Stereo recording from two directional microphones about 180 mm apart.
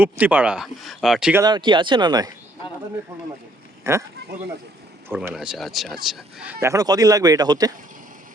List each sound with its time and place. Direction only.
0.0 s speech: 10° right (ahead or behind)
1.4 s speech: 25° right (ahead or behind)
3.8 s speech: 15° right (ahead or behind)